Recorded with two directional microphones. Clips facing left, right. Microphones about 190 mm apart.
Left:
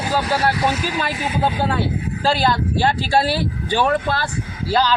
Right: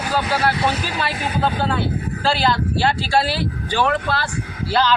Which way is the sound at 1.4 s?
15° left (ahead or behind).